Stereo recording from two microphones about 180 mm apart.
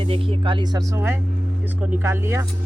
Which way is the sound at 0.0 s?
30° right (ahead or behind).